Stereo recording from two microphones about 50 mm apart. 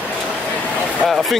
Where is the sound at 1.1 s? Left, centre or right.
Centre.